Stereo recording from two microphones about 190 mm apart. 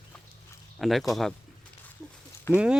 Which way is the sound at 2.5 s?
15° left (ahead or behind).